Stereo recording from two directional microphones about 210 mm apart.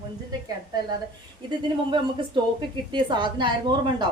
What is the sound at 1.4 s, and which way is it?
A woman's voice, 20° right (ahead or behind).